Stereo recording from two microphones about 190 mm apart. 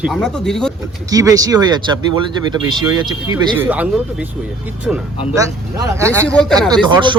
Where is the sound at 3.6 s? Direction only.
10° right (ahead or behind).